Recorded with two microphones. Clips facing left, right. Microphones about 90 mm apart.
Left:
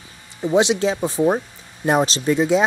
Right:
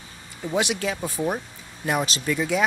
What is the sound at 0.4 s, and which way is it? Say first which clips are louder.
Speech: left 8 dB; 25° left (ahead or behind).